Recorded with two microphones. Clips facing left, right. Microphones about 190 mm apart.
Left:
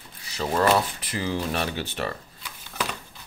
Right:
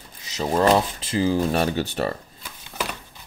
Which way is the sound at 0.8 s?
25° right (ahead or behind).